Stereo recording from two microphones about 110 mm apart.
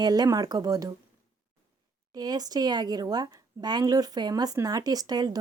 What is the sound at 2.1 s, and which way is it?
Speech, 35° right (ahead or behind).